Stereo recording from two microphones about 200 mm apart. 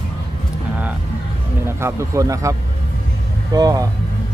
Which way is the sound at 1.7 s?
10° right (ahead or behind).